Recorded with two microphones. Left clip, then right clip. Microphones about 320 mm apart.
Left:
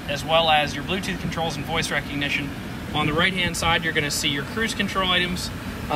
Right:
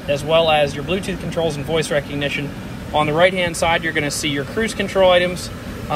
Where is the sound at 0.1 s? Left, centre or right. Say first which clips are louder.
Right 4 dB; centre.